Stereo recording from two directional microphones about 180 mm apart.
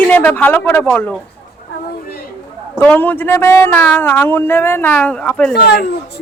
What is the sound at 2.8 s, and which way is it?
Speech, 10° left (ahead or behind).